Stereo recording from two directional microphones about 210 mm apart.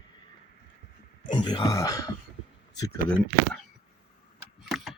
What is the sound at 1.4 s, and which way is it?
Speech, 20° left (ahead or behind).